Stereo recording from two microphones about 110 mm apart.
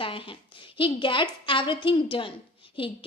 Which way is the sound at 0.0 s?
50° left (ahead or behind).